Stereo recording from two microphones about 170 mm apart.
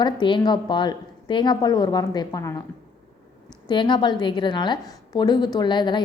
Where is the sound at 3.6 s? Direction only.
25° left (ahead or behind).